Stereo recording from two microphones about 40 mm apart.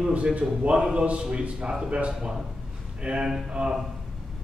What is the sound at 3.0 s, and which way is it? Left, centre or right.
Speech, right.